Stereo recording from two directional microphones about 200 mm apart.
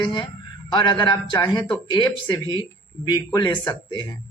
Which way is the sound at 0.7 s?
25° left (ahead or behind).